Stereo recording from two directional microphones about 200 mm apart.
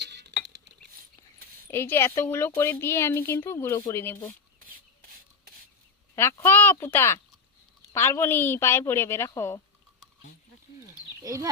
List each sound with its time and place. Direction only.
0.0 s a sound: 60° right (ahead or behind)
1.7 s speech: 10° left (ahead or behind)
6.1 s speech: 10° left (ahead or behind)
11.2 s speech: 15° right (ahead or behind)